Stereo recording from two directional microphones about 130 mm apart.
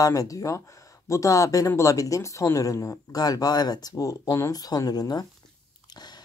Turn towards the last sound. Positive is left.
turn(degrees=30)  # may be behind; listen again after turning